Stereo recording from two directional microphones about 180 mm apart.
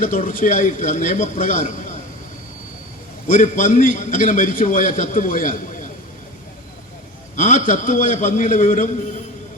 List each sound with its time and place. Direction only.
0.0 s a man's voice: 45° left (ahead or behind)
3.2 s a man's voice: 45° left (ahead or behind)
7.3 s a man's voice: 45° left (ahead or behind)